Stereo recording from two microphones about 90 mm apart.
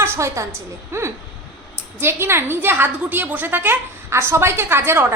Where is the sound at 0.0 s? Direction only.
30° right (ahead or behind).